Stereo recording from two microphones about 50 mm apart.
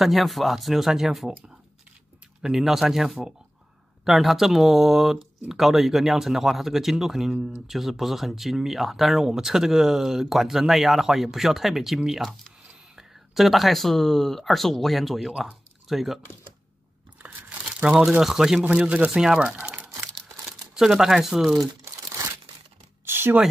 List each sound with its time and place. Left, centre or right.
0.0 s speech: centre
2.4 s speech: centre
17.2 s crumpling: right
18.2 s speech: centre
18.6 s speech: right
19.2 s speech: centre
19.6 s crumpling: right
20.4 s speech: centre
21.8 s crumpling: right
23.0 s a sound: right